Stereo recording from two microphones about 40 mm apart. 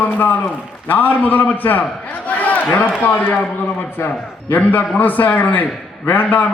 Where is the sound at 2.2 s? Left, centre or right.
Left.